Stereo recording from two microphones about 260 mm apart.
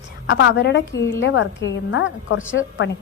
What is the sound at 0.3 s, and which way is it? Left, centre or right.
A woman's voice, left.